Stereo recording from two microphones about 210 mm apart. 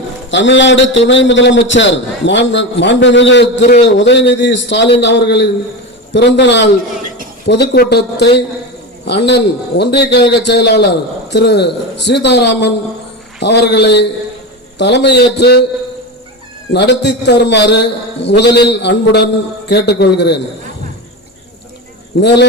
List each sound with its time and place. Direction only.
0.3 s a man's voice: 60° left (ahead or behind)
16.7 s a man's voice: 55° left (ahead or behind)
22.1 s a man's voice: 55° left (ahead or behind)